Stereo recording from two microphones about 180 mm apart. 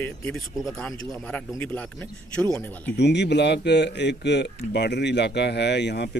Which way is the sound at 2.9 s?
70° left (ahead or behind).